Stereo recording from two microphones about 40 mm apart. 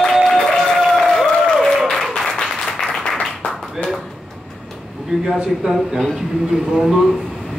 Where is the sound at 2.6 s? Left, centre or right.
Centre.